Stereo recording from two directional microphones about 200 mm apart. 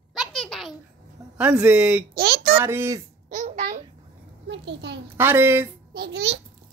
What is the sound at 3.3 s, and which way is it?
Babbling, 40° right (ahead or behind).